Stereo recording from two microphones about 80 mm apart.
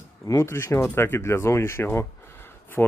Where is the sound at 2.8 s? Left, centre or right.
Centre.